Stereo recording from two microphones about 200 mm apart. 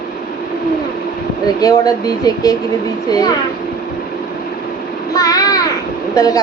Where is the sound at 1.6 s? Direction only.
20° left (ahead or behind).